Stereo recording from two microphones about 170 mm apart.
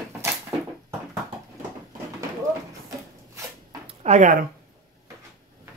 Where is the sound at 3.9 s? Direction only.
40° right (ahead or behind).